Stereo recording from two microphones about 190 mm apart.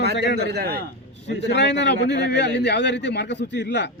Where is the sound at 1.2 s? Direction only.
65° left (ahead or behind).